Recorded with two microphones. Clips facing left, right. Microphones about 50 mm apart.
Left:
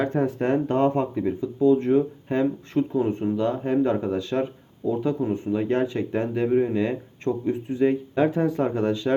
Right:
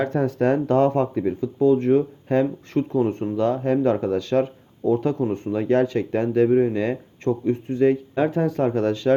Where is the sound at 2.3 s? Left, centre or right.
Right.